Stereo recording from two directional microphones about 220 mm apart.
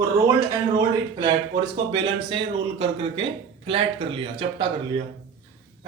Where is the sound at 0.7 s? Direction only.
20° right (ahead or behind).